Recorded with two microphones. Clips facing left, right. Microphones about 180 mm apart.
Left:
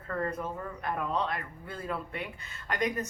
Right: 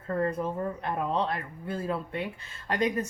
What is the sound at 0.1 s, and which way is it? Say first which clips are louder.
Speech: right 5 dB; 25° right (ahead or behind).